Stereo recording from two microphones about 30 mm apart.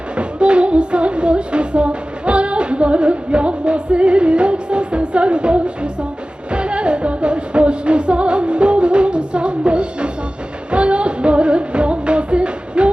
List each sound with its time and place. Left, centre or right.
0.2 s music: right